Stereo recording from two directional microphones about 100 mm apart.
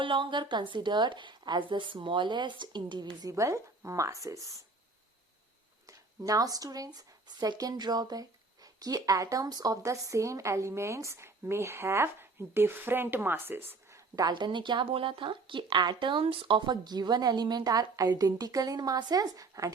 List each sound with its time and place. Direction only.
0.0 s a woman's voice: 60° right (ahead or behind)
3.2 s speech: 30° right (ahead or behind)
5.8 s speech: 35° right (ahead or behind)
14.2 s a woman's voice: 45° right (ahead or behind)